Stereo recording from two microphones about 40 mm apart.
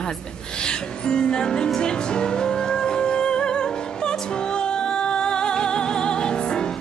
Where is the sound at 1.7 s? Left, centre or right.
Centre.